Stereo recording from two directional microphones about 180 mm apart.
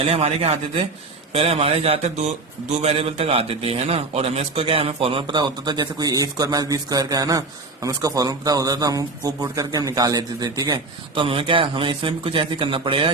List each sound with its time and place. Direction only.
0.0 s a man's voice: 35° right (ahead or behind)